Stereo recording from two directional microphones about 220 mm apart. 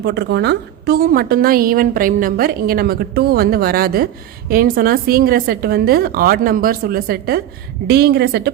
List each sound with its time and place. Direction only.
0.0 s a woman's voice: 50° right (ahead or behind)